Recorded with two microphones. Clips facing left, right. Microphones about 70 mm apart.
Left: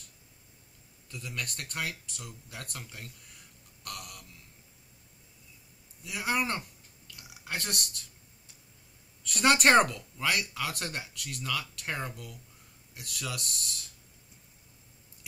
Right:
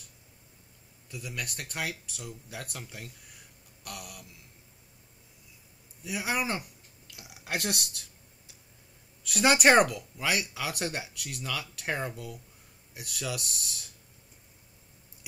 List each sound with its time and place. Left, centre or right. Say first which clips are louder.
1.1 s speech: right 1 dB; centre
3.8 s speech: even; centre
6.0 s speech: even; centre
9.3 s speech: right 1 dB; centre